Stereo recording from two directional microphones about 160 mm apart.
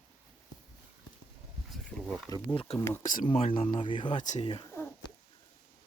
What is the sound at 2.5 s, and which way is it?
Speech, 35° left (ahead or behind).